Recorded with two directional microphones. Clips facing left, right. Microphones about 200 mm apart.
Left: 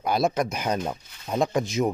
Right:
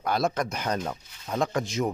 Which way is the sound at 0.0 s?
10° left (ahead or behind).